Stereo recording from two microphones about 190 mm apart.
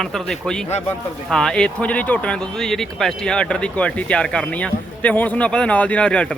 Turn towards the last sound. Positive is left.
turn(degrees=5)  # may be behind; listen again after turning